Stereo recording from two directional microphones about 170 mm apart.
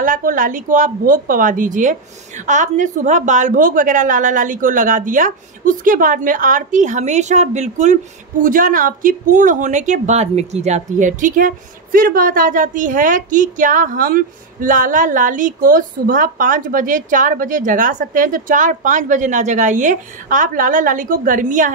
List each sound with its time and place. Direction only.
0.0 s a woman's voice: 55° right (ahead or behind)